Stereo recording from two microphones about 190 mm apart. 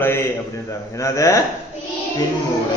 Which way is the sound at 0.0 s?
10° left (ahead or behind).